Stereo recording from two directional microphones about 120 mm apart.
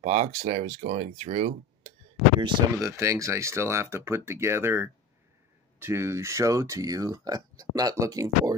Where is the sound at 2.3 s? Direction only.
40° right (ahead or behind).